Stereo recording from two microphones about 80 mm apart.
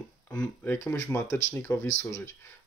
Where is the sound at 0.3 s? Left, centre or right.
Centre.